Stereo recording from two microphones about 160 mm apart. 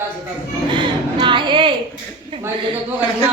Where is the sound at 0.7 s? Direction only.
30° right (ahead or behind).